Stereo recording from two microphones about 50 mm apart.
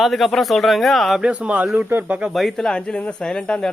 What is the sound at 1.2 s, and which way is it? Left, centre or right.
Speech, right.